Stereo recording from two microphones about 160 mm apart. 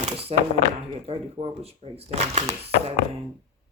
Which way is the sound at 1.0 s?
40° right (ahead or behind).